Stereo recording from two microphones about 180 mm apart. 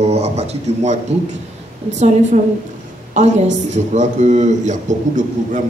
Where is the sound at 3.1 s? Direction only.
40° right (ahead or behind).